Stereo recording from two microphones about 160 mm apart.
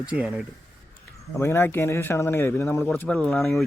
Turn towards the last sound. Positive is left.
turn(degrees=5)  # may be behind; listen again after turning